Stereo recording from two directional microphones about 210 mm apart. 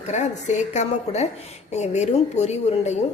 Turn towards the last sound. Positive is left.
turn(degrees=30)  # may be behind; listen again after turning